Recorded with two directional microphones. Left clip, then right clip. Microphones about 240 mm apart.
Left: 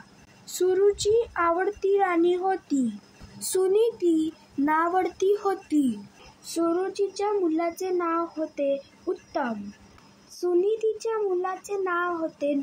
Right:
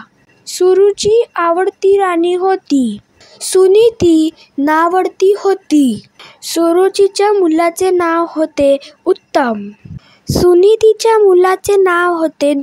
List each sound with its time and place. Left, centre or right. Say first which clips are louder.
0.5 s speech: right 13 dB; right